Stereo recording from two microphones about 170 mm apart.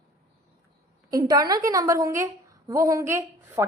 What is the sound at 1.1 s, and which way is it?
A woman's voice, 20° right (ahead or behind).